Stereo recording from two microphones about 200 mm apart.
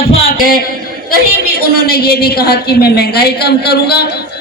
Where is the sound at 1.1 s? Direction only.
50° left (ahead or behind).